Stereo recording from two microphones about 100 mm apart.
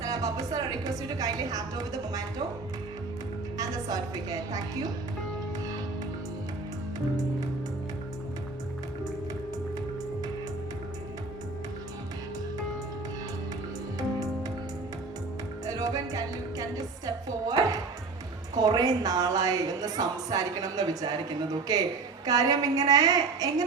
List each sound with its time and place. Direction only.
0.0 s a woman's voice: 35° right (ahead or behind)
3.6 s a woman's voice: 40° right (ahead or behind)
15.6 s music: 35° right (ahead or behind)
18.5 s a woman's voice: 40° right (ahead or behind)